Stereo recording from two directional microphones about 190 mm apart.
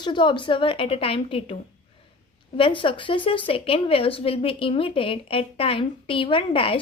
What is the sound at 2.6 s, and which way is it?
A woman's voice, 25° left (ahead or behind).